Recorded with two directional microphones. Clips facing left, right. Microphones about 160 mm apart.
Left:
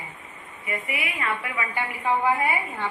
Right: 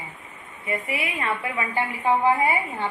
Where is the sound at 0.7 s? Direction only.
30° right (ahead or behind).